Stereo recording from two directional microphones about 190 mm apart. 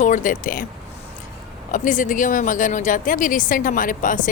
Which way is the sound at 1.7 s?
45° left (ahead or behind).